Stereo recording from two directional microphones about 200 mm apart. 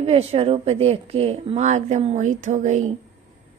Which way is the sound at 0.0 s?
30° right (ahead or behind).